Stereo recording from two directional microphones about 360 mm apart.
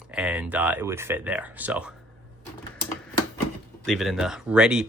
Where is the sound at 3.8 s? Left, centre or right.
Centre.